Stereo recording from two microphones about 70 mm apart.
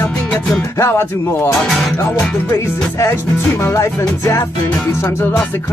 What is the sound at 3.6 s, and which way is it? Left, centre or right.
Music, left.